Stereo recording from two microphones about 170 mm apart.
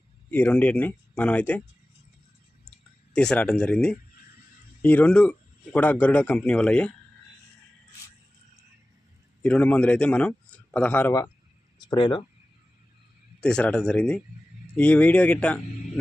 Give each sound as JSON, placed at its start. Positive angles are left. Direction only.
{"t": 0.3, "sound": "a man's voice", "side_deg": 10}
{"t": 2.6, "sound": "clicking", "side_deg": 5}
{"t": 4.8, "sound": "a man's voice", "side_deg": 10}
{"t": 9.4, "sound": "speech", "side_deg": 5}
{"t": 11.9, "sound": "speech", "side_deg": 30}
{"t": 13.4, "sound": "a man's voice", "side_deg": 5}